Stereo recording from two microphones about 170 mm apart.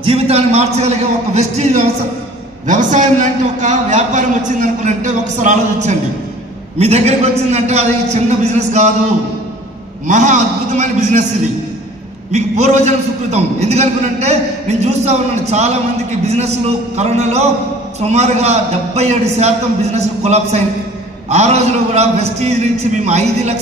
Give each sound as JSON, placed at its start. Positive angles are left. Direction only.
{"t": 0.0, "sound": "a man's voice", "side_deg": -35}
{"t": 10.0, "sound": "a man's voice", "side_deg": -45}
{"t": 12.3, "sound": "a man's voice", "side_deg": -40}
{"t": 21.9, "sound": "a man's voice", "side_deg": -40}